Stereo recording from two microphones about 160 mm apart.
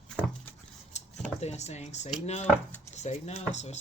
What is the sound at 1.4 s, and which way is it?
Speech, 45° left (ahead or behind).